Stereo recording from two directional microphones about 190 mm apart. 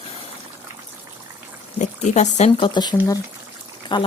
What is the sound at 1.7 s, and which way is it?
Speech, 40° left (ahead or behind).